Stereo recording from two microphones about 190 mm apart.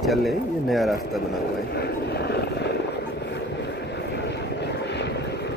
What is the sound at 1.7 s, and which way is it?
Boat, 60° left (ahead or behind).